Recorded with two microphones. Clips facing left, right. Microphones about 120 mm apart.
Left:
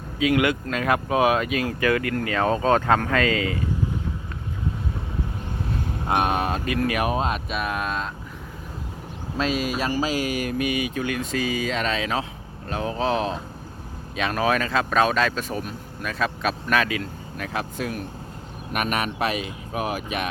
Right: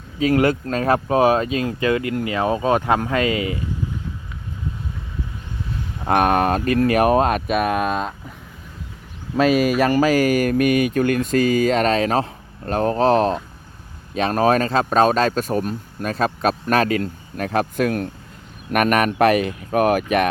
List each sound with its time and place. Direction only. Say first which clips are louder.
0.2 s speech: right 4 dB; 35° right (ahead or behind); by 3.6 s 20° right (ahead or behind)
6.1 s speech: right 6 dB; 50° right (ahead or behind)
6.7 s speech: right 8 dB; 40° right (ahead or behind)
9.4 s speech: right 9 dB; 60° right (ahead or behind)